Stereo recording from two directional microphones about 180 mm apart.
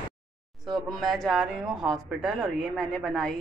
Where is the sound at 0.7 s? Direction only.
Centre (ahead or behind).